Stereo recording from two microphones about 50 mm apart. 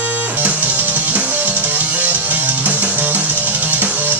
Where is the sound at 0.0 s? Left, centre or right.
Right.